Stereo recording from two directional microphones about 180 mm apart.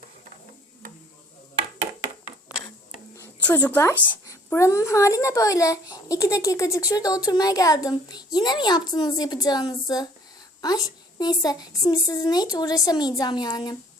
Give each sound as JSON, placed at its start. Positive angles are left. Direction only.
{"t": 3.2, "sound": "speech", "side_deg": 10}